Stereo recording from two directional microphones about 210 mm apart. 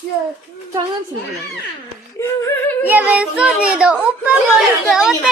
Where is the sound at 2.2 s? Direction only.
10° left (ahead or behind).